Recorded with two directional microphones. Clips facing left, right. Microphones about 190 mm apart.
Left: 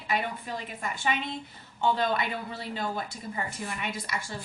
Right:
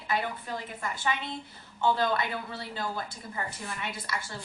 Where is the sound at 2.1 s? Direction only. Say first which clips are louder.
Left 1 dB; 20° left (ahead or behind).